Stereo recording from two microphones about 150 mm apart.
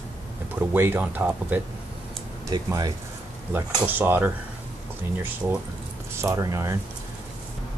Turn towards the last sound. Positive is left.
turn(degrees=-20)  # may be behind; listen again after turning